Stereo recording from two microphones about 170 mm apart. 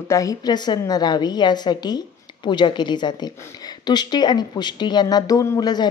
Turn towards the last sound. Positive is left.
turn(degrees=25)  # may be behind; listen again after turning